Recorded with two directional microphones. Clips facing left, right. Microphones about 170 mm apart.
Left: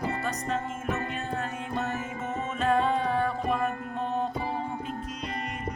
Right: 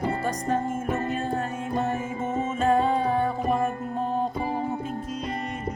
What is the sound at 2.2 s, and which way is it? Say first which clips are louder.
Music: right 6 dB; 10° right (ahead or behind).